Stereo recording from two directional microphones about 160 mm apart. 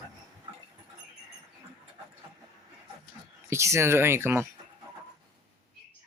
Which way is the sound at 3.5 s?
15° right (ahead or behind).